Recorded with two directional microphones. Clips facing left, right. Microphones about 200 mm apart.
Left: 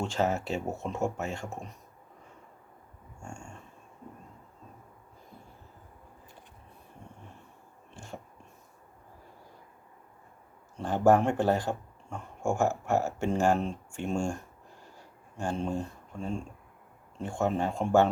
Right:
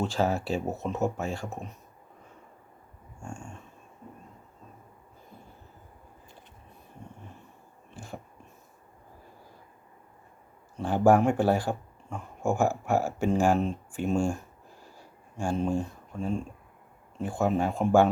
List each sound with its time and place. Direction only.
0.0 s speech: 10° right (ahead or behind)
0.3 s speech: 25° left (ahead or behind)
0.9 s speech: 5° right (ahead or behind)
3.2 s speech: 5° right (ahead or behind)
7.9 s a sound: 5° right (ahead or behind)
10.8 s speech: 10° right (ahead or behind)